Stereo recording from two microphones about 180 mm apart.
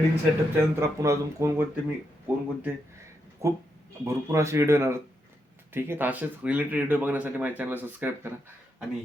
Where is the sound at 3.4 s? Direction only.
15° right (ahead or behind).